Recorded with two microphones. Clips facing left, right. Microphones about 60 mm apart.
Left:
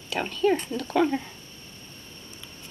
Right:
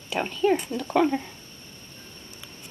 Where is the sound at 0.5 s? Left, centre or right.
Centre.